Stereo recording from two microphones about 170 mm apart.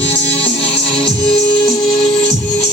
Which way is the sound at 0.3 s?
35° left (ahead or behind).